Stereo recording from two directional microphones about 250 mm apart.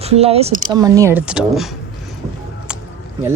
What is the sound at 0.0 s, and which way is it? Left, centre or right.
Speech, right.